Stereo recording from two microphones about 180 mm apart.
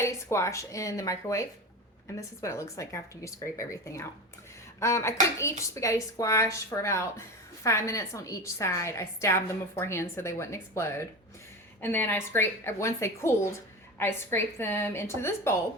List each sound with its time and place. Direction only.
0.0 s a woman's voice: 15° left (ahead or behind)